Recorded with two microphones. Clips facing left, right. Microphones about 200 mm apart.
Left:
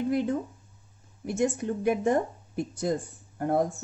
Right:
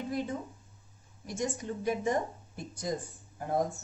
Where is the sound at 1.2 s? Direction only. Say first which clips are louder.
Left 8 dB; 60° left (ahead or behind).